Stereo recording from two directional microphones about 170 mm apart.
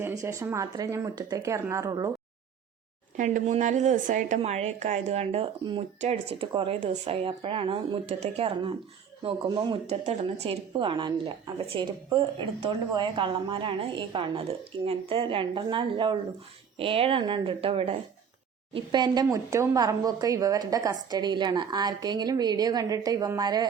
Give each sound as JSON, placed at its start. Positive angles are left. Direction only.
{"t": 0.0, "sound": "speech", "side_deg": -20}
{"t": 3.2, "sound": "a woman's voice", "side_deg": -45}
{"t": 9.2, "sound": "speech", "side_deg": -25}
{"t": 9.8, "sound": "speech", "side_deg": -40}
{"t": 12.9, "sound": "speech", "side_deg": -25}